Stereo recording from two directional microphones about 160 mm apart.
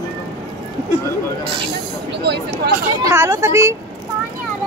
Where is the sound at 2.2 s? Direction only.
90° right.